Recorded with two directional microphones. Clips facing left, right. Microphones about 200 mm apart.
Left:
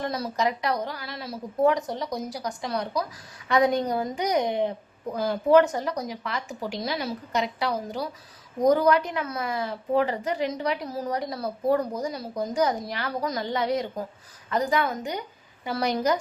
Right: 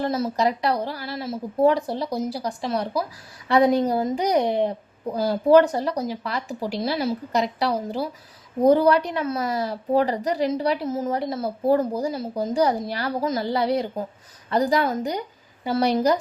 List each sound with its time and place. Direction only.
0.0 s a woman's voice: 30° right (ahead or behind)
10.8 s a woman's voice: 20° right (ahead or behind)